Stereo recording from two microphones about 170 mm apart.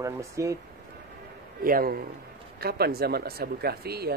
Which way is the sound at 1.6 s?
60° right (ahead or behind).